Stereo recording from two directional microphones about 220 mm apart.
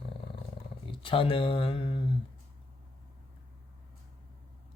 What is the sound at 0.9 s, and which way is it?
Speech, 25° left (ahead or behind).